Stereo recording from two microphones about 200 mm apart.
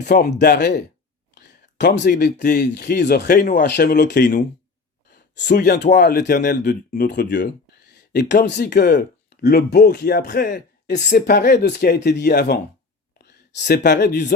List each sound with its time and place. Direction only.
0.0 s speech: 55° left (ahead or behind)
5.5 s speech: 55° left (ahead or behind); by 11.3 s 40° left (ahead or behind)
11.3 s speech: 55° left (ahead or behind)
13.7 s speech: 55° left (ahead or behind)